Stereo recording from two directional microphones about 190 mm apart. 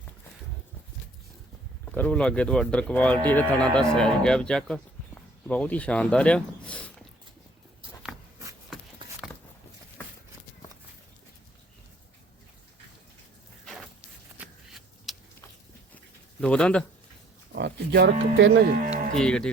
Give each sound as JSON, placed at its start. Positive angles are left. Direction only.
{"t": 1.8, "sound": "speech", "side_deg": 5}
{"t": 9.0, "sound": "a sound", "side_deg": -25}
{"t": 14.3, "sound": "shuffling cards", "side_deg": 0}
{"t": 16.4, "sound": "speech", "side_deg": 5}
{"t": 17.5, "sound": "speech", "side_deg": -60}
{"t": 19.1, "sound": "speech", "side_deg": 5}